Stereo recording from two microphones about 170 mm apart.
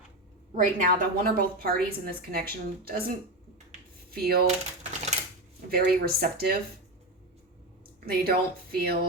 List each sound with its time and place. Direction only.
0.5 s a woman's voice: 50° right (ahead or behind)
4.1 s a woman's voice: 65° right (ahead or behind)
4.4 s typewriter: 40° right (ahead or behind)
5.6 s a woman's voice: 65° right (ahead or behind)
8.0 s a woman's voice: 60° right (ahead or behind)